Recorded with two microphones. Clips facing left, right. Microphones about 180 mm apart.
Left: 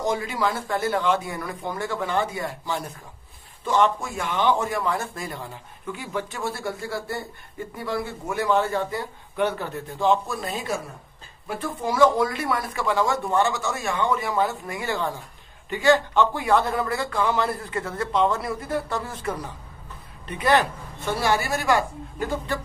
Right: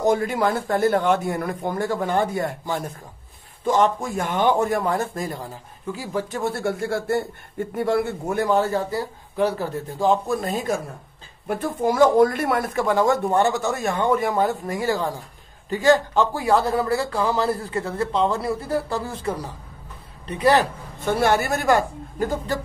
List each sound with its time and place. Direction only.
0.0 s speech: 55° right (ahead or behind)
3.6 s a man's voice: 40° right (ahead or behind)
6.5 s a man's voice: 65° right (ahead or behind); by 21.1 s 40° right (ahead or behind)
21.1 s speech: 55° right (ahead or behind)